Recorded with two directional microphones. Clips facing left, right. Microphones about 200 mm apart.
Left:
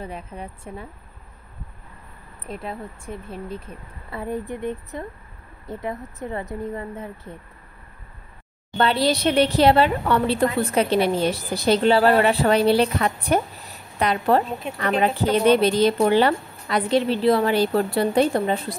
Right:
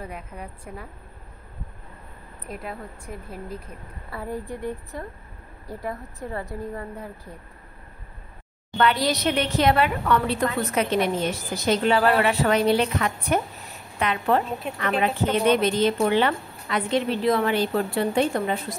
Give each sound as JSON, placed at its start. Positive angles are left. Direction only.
{"t": 0.0, "sound": "a woman's voice", "side_deg": 30}
{"t": 2.4, "sound": "a woman's voice", "side_deg": 25}
{"t": 8.7, "sound": "a woman's voice", "side_deg": 30}